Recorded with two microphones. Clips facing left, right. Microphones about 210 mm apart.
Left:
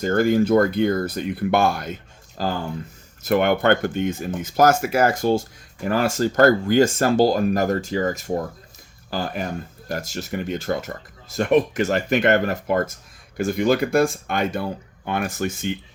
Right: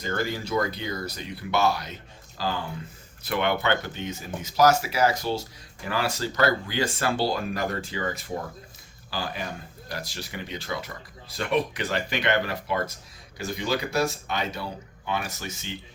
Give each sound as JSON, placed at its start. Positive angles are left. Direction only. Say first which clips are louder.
{"t": 0.0, "sound": "speech", "louder": "left 11 dB", "side_deg": 50}